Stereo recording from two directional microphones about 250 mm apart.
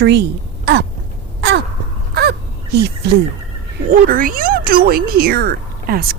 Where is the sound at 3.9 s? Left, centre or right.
Right.